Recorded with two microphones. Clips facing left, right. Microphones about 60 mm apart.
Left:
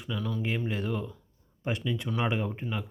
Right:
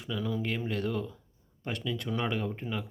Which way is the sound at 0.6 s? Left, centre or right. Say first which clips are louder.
Even; centre.